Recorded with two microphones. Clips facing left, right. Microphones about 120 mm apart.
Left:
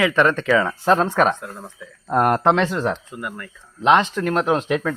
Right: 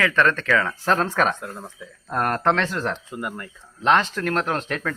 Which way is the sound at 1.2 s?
5° left (ahead or behind).